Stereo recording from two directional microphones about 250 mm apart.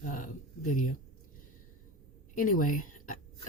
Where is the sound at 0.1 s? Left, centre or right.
Left.